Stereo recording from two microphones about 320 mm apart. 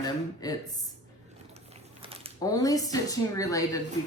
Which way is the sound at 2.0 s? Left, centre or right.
Centre.